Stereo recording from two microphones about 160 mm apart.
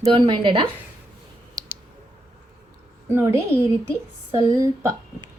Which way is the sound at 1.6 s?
25° right (ahead or behind).